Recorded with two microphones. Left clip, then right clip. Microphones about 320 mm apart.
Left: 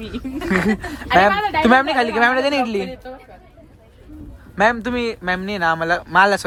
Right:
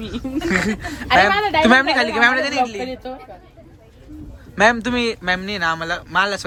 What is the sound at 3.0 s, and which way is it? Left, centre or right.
Speech, right.